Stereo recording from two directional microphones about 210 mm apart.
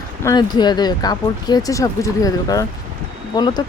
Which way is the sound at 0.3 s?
20° left (ahead or behind).